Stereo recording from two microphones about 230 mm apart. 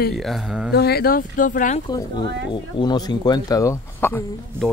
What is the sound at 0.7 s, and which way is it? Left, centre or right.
Speech, left.